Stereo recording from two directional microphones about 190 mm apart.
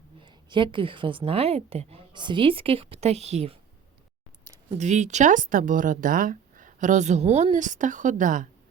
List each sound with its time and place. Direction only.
0.2 s a woman's voice: 25° right (ahead or behind)
4.7 s speech: 40° right (ahead or behind)